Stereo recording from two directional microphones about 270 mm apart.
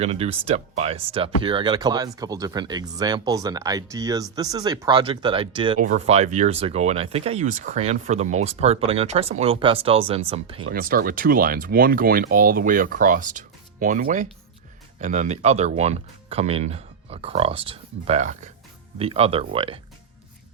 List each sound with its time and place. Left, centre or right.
0.0 s speech: right
10.6 s speech: right